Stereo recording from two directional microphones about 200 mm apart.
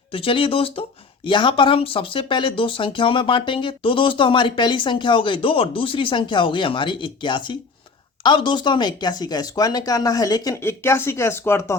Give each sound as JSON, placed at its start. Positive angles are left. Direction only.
{"t": 0.1, "sound": "speech", "side_deg": 25}